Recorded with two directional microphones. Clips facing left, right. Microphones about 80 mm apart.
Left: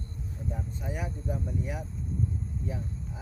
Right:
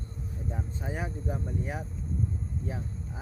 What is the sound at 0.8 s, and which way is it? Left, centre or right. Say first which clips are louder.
Speech: right 1 dB; right.